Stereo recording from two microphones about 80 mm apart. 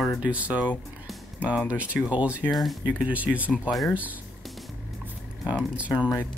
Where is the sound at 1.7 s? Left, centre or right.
Centre.